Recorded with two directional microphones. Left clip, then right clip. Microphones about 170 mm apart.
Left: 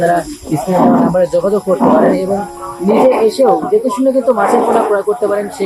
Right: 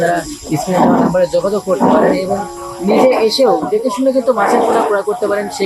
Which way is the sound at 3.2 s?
15° left (ahead or behind).